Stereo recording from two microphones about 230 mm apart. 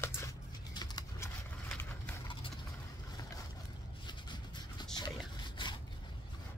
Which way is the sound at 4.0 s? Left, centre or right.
Centre.